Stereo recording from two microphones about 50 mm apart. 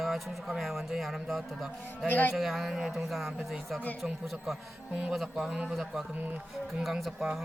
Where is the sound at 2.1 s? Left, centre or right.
Left.